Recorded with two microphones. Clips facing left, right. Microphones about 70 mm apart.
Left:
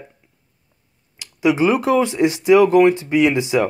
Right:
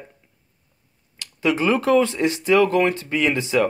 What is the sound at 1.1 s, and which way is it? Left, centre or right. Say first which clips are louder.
Speech: left 4 dB; centre.